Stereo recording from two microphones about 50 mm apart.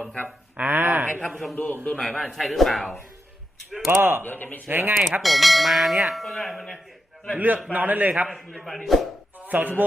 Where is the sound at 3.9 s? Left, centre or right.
Right.